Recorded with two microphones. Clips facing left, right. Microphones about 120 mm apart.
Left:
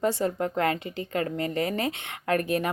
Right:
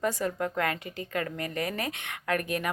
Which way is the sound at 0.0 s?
30° left (ahead or behind).